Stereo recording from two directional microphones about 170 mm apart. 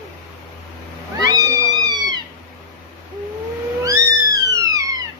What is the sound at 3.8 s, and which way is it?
Cat, 20° right (ahead or behind).